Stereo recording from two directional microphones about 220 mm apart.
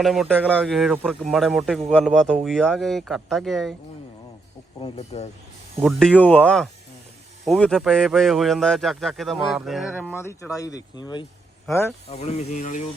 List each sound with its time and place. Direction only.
0.0 s speech: centre (ahead or behind)
4.8 s speech: 30° left (ahead or behind)
5.8 s speech: centre (ahead or behind)
10.2 s speech: 10° left (ahead or behind)
12.1 s speech: 30° left (ahead or behind)